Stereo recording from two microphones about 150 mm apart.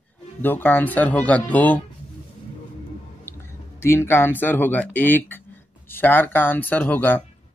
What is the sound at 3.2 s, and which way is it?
Speech, 15° left (ahead or behind).